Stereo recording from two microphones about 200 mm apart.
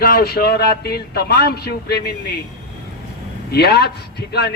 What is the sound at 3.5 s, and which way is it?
Speech, 50° left (ahead or behind).